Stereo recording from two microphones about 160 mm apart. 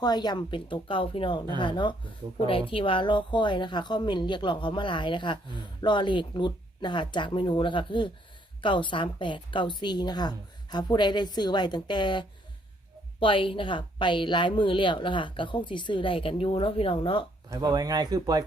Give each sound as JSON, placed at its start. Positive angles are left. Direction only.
{"t": 0.0, "sound": "a woman's voice", "side_deg": 25}
{"t": 17.5, "sound": "speech", "side_deg": -25}